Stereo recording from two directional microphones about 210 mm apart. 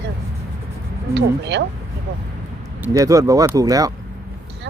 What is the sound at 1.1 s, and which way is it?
Speech, 55° right (ahead or behind).